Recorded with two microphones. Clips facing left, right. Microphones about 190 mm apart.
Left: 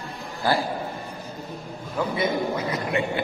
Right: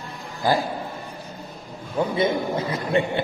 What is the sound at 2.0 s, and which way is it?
A man's voice, 25° right (ahead or behind).